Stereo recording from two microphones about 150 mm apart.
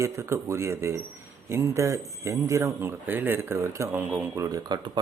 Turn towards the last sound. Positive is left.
turn(degrees=-25)  # may be behind; listen again after turning